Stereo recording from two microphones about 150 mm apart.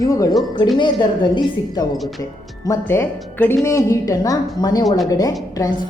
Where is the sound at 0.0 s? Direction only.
20° left (ahead or behind).